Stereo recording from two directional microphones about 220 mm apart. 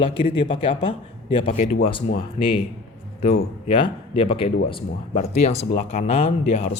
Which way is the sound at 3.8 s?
25° left (ahead or behind).